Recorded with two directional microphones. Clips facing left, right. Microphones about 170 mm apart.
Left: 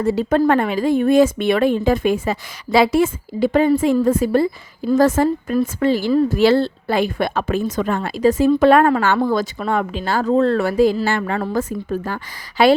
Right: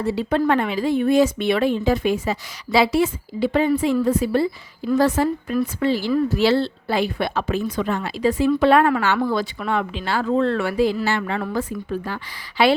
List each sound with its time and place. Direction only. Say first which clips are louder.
0.0 s speech: left 4 dB; 45° left (ahead or behind)